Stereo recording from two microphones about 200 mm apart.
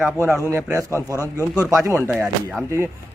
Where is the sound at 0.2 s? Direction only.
15° right (ahead or behind).